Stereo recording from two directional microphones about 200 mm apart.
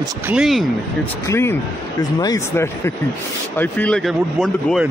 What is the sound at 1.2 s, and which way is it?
Speech, 10° left (ahead or behind).